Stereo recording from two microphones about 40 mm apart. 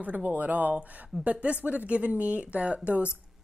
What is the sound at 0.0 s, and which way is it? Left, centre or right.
A woman's voice, right.